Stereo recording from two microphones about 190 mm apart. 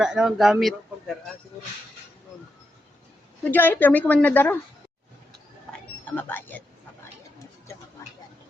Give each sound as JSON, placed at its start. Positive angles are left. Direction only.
{"t": 0.0, "sound": "a man's voice", "side_deg": -5}
{"t": 3.4, "sound": "a woman's voice", "side_deg": 10}
{"t": 6.1, "sound": "a woman's voice", "side_deg": 10}
{"t": 8.0, "sound": "a sound", "side_deg": 15}